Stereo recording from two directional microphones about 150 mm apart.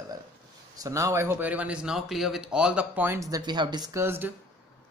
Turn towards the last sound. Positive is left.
turn(degrees=-15)  # may be behind; listen again after turning